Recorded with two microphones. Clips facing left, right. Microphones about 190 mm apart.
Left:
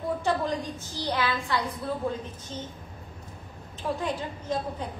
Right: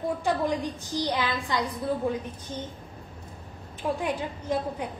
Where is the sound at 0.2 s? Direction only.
15° right (ahead or behind).